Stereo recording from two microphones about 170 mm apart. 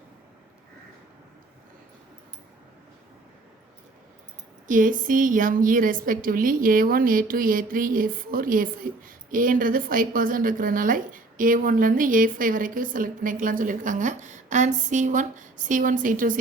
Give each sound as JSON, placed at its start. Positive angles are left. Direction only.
{"t": 4.7, "sound": "a woman's voice", "side_deg": -50}